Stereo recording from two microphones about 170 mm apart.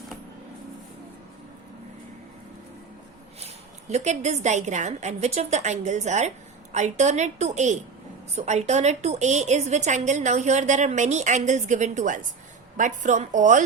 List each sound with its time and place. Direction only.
3.4 s a woman's voice: 40° right (ahead or behind)